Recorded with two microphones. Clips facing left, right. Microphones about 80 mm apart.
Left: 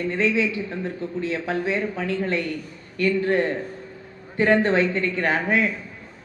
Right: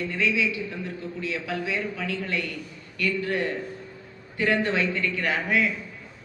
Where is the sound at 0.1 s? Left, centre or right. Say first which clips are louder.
Left 5 dB; left.